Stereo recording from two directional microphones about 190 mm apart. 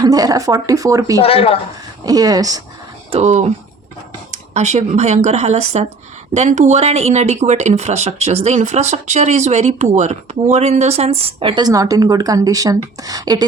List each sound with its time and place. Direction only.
0.0 s speech: 20° right (ahead or behind)
1.2 s speech: 30° left (ahead or behind)
2.0 s a woman's voice: 20° right (ahead or behind)
3.1 s speech: 35° right (ahead or behind)
4.5 s speech: 35° right (ahead or behind); by 13.4 s 20° right (ahead or behind)